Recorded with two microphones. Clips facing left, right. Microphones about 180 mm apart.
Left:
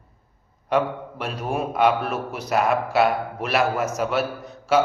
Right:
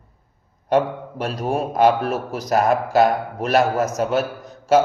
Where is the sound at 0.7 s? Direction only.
40° right (ahead or behind).